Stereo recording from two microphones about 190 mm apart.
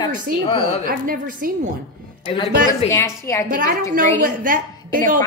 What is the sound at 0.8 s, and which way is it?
Speech, 45° right (ahead or behind).